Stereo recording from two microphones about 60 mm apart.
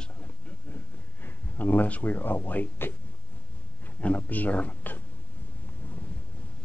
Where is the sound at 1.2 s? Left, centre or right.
Left.